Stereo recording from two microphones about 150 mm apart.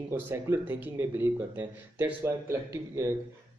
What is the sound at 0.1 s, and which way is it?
Speech, 15° right (ahead or behind).